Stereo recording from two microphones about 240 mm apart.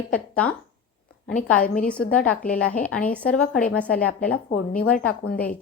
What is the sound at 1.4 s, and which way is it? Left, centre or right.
Speech, left.